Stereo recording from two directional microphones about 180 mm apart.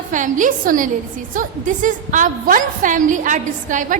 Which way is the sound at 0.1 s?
45° right (ahead or behind).